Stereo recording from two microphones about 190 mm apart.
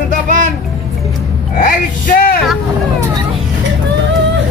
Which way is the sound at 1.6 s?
50° left (ahead or behind).